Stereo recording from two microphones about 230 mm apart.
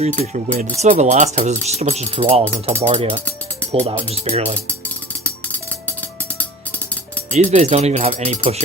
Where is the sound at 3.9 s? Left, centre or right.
Right.